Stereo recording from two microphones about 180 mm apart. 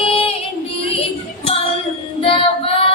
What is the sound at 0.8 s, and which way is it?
Music, 30° left (ahead or behind).